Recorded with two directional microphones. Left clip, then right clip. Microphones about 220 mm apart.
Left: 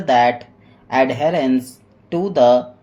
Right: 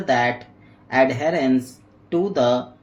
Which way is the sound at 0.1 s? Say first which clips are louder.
Left 6 dB; 25° left (ahead or behind).